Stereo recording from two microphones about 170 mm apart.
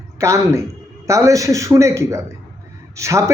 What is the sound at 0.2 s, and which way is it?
Speech, 15° right (ahead or behind).